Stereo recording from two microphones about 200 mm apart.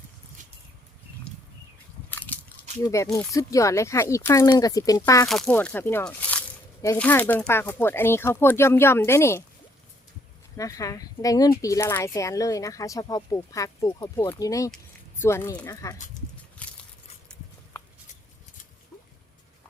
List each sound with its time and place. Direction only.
2.0 s biting: 10° left (ahead or behind)
2.8 s speech: 15° left (ahead or behind)
5.3 s speech: 5° left (ahead or behind)
10.6 s speech: 15° left (ahead or behind)
16.6 s a sound: 5° left (ahead or behind)